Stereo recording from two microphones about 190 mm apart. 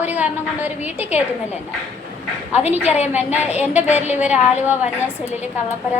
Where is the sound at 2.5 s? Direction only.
35° left (ahead or behind).